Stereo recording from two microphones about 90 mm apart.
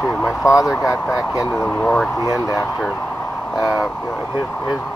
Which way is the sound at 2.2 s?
40° left (ahead or behind).